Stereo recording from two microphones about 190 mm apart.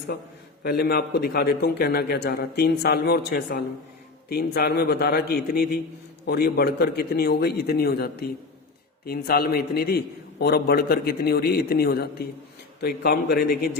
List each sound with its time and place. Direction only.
0.6 s a man's voice: 55° left (ahead or behind)